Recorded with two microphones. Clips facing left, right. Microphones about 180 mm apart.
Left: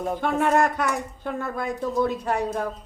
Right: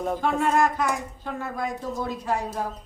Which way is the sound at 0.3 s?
60° left (ahead or behind).